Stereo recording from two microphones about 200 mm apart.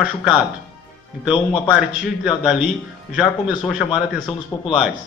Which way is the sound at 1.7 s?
Centre (ahead or behind).